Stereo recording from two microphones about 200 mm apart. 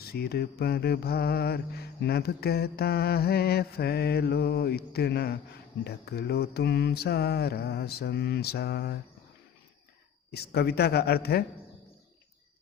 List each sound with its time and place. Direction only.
0.0 s mantra: 50° left (ahead or behind)
10.3 s mantra: 55° left (ahead or behind)